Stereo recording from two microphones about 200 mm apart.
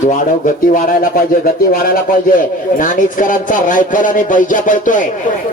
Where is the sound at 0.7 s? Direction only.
40° left (ahead or behind).